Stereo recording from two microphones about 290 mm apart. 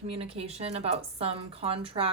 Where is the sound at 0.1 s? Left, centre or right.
Right.